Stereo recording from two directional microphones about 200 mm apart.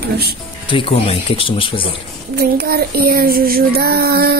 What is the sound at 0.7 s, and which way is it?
Speech, 25° left (ahead or behind).